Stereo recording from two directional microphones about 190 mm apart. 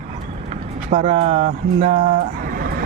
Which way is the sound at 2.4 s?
50° right (ahead or behind).